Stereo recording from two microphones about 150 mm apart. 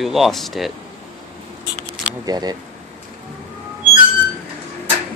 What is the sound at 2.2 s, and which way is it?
Speech, 25° right (ahead or behind).